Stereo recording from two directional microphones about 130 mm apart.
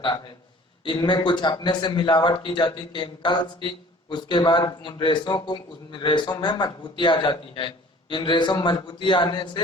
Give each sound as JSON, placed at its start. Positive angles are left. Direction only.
{"t": 0.9, "sound": "a man's voice", "side_deg": 35}